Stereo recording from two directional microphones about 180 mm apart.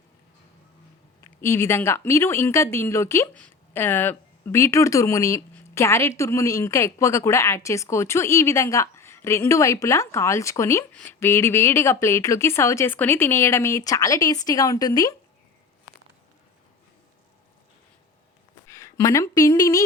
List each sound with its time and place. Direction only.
1.2 s speech: 15° left (ahead or behind)
18.7 s speech: 15° left (ahead or behind)